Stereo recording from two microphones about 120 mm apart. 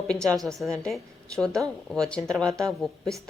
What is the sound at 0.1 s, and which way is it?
A woman's voice, 10° left (ahead or behind).